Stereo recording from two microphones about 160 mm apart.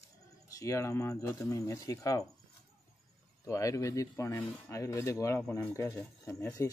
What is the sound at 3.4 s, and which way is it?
Speech, 20° left (ahead or behind).